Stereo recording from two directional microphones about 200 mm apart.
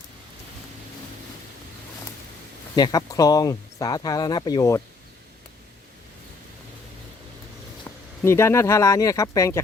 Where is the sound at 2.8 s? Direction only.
20° left (ahead or behind).